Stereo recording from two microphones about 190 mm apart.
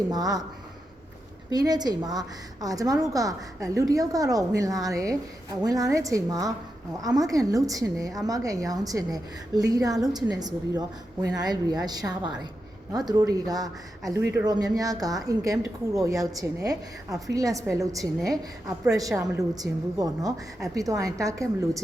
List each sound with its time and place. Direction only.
0.1 s speech: 20° right (ahead or behind)
1.5 s a woman's voice: 20° right (ahead or behind)